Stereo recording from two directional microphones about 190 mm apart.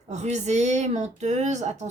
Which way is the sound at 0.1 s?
40° right (ahead or behind).